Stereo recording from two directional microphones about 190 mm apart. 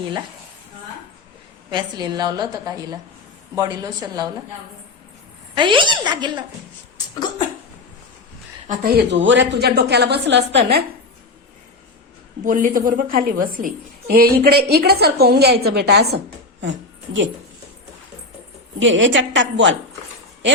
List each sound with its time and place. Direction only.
1.7 s a woman's voice: 20° right (ahead or behind)
5.5 s a woman's voice: 25° right (ahead or behind)
8.6 s a woman's voice: 45° right (ahead or behind)
12.4 s a woman's voice: 45° right (ahead or behind); by 16.7 s 65° right (ahead or behind)
18.8 s a woman's voice: 80° right